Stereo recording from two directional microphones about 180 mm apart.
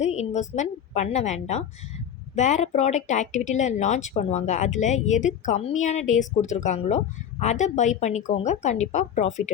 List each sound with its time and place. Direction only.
0.0 s a woman's voice: 40° left (ahead or behind)